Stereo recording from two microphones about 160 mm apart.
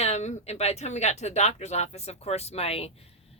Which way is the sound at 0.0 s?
45° left (ahead or behind).